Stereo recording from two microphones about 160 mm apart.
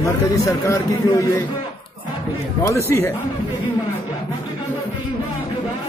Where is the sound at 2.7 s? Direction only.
15° left (ahead or behind).